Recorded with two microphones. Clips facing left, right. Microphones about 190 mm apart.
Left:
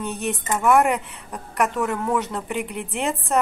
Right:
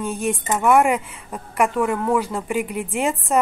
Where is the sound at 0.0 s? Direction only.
Centre (ahead or behind).